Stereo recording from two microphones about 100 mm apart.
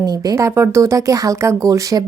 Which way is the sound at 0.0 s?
40° right (ahead or behind).